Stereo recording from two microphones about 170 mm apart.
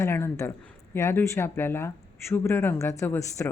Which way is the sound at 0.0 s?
15° left (ahead or behind).